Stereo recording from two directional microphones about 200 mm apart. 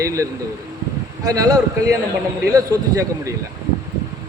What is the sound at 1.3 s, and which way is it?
Speech, 15° right (ahead or behind).